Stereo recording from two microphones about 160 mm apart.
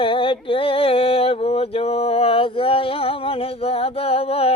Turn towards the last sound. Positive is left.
turn(degrees=35)  # may be behind; listen again after turning